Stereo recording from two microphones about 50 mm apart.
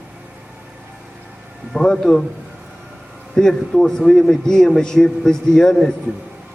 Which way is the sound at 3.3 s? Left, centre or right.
Centre.